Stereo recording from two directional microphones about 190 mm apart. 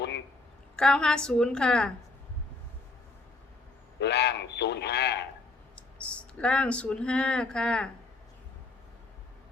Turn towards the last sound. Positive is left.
turn(degrees=5)  # may be behind; listen again after turning